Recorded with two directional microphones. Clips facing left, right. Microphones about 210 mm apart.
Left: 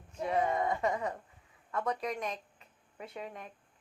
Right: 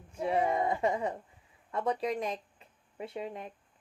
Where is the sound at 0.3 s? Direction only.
30° right (ahead or behind).